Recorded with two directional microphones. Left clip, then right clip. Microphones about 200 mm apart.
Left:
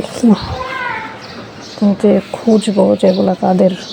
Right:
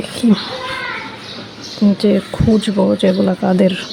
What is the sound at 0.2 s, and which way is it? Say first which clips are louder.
Speech: left 3 dB; 15° right (ahead or behind).